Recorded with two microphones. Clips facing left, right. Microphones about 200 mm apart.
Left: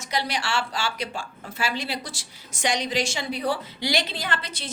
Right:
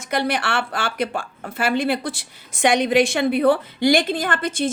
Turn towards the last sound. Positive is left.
turn(degrees=-50)  # may be behind; listen again after turning